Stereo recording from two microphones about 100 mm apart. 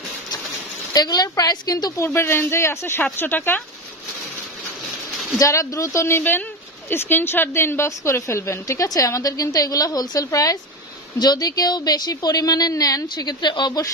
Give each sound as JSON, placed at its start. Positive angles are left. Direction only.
{"t": 0.9, "sound": "a woman's voice", "side_deg": 40}
{"t": 2.0, "sound": "a woman's voice", "side_deg": 25}
{"t": 5.4, "sound": "a woman's voice", "side_deg": 35}